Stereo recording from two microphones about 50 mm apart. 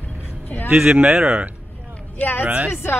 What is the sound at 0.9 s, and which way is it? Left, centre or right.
Speech, right.